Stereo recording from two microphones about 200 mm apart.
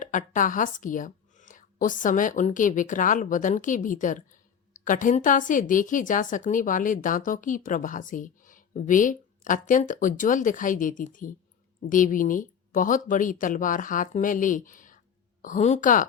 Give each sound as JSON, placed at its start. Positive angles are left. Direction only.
{"t": 0.0, "sound": "a woman's voice", "side_deg": 40}